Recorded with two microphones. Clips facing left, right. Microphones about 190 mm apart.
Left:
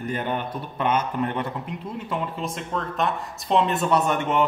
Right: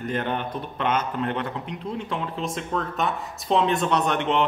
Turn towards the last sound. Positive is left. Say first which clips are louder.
# left 1 dB
turn(degrees=5)  # may be behind; listen again after turning